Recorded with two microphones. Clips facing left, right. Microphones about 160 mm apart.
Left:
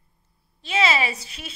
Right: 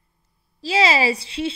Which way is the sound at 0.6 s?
35° right (ahead or behind).